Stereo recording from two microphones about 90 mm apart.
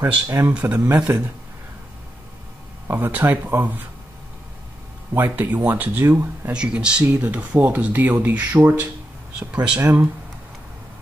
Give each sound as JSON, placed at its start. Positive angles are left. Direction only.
{"t": 0.0, "sound": "speech", "side_deg": -30}
{"t": 0.9, "sound": "speech", "side_deg": -15}
{"t": 2.9, "sound": "speech", "side_deg": -20}
{"t": 5.1, "sound": "speech", "side_deg": -25}
{"t": 6.5, "sound": "speech", "side_deg": -10}